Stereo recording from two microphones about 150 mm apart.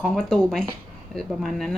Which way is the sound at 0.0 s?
Centre (ahead or behind).